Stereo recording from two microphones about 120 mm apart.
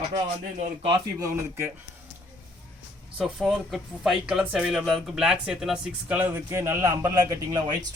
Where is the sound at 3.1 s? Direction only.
5° right (ahead or behind).